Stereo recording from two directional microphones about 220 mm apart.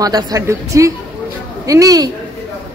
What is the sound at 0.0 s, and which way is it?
A woman's voice, 15° right (ahead or behind).